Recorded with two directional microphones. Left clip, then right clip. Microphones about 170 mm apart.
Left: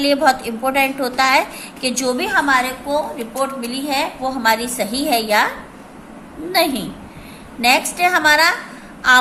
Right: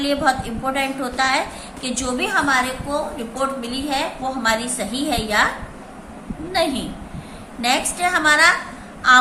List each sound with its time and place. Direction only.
0.0 s a woman's voice: 35° left (ahead or behind)
6.5 s a woman's voice: 40° left (ahead or behind)